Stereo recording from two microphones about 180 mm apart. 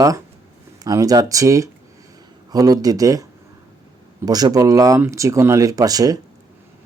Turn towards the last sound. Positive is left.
turn(degrees=-20)  # may be behind; listen again after turning